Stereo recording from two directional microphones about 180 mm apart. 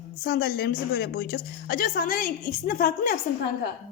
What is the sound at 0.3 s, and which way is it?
A woman's voice, 55° left (ahead or behind).